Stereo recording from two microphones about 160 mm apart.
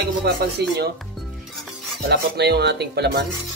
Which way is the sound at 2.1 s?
90° right.